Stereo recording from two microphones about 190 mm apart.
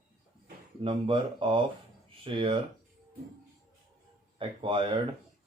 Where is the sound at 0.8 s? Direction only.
25° right (ahead or behind).